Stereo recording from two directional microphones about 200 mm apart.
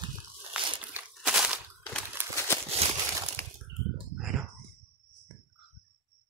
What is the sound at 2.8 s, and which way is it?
Crumpling, 30° right (ahead or behind).